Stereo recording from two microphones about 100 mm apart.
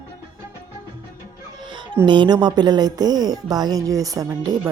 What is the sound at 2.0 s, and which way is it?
Speech, 55° right (ahead or behind).